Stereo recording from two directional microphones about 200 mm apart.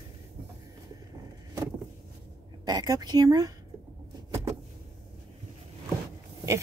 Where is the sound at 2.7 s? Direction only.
20° right (ahead or behind).